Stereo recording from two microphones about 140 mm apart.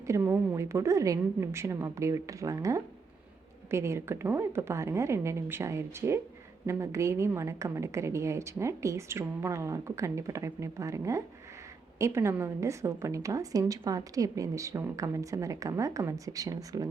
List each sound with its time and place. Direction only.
0.1 s a woman's voice: 20° right (ahead or behind)